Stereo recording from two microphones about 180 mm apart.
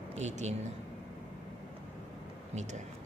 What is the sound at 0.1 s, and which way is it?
Speech, 40° right (ahead or behind).